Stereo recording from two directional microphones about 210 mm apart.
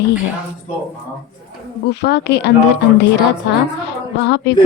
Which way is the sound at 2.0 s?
50° left (ahead or behind).